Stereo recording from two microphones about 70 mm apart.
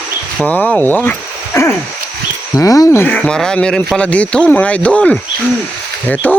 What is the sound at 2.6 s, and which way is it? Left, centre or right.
Speech, left.